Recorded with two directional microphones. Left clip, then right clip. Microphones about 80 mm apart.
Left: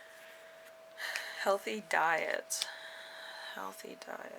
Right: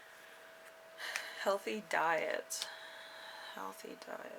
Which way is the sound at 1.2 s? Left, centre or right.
Left.